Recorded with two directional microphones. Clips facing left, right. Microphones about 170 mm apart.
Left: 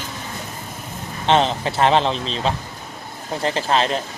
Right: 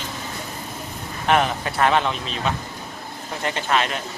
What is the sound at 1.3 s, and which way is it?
A man's voice, 25° left (ahead or behind).